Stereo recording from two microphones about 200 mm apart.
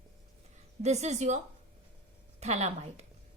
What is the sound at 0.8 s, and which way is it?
Speech, 35° right (ahead or behind).